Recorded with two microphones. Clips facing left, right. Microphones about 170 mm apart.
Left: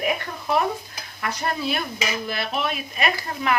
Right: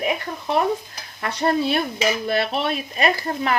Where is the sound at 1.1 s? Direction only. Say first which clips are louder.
Right 6 dB; 30° right (ahead or behind).